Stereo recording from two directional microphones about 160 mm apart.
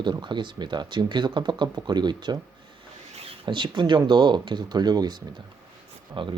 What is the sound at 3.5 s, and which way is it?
Speech, 30° right (ahead or behind).